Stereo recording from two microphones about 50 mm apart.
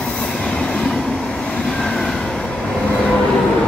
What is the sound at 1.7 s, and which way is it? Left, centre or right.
Train, centre.